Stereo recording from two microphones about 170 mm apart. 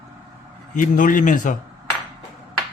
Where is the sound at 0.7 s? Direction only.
50° left (ahead or behind).